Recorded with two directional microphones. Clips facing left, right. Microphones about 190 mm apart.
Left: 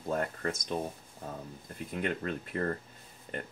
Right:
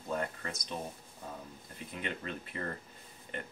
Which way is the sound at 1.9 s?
45° left (ahead or behind).